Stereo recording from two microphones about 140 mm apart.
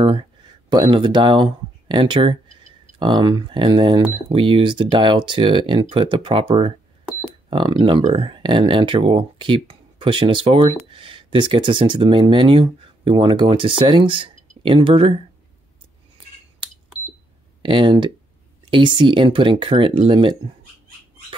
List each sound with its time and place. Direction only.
0.0 s speech: 35° right (ahead or behind)
17.6 s speech: 40° right (ahead or behind)